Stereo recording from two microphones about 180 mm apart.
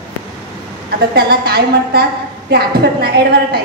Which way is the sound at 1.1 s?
60° right (ahead or behind).